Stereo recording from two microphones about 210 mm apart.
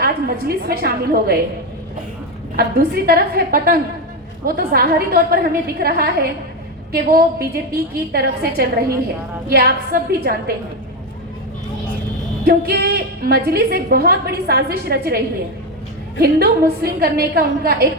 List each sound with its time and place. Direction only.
0.0 s a woman's voice: 45° right (ahead or behind)
2.6 s a woman's voice: 45° right (ahead or behind)
12.5 s a woman's voice: 45° right (ahead or behind)
16.2 s a woman's voice: 45° right (ahead or behind)